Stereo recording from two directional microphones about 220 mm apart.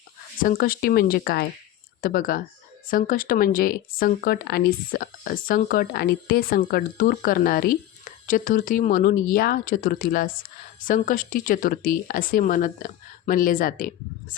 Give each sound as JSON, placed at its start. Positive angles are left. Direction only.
{"t": 0.4, "sound": "speech", "side_deg": 40}